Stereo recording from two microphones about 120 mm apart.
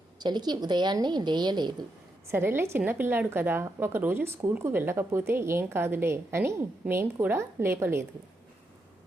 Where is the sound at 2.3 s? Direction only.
20° right (ahead or behind).